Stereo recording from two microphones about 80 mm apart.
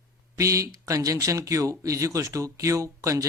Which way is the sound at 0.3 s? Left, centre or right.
Right.